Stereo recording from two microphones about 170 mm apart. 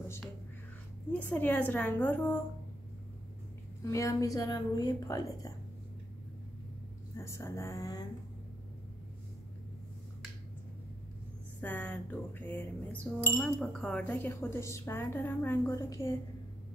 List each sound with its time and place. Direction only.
1.1 s speech: 10° left (ahead or behind)
3.8 s a woman's voice: 20° left (ahead or behind)
7.2 s speech: 15° left (ahead or behind)
11.6 s speech: 10° left (ahead or behind)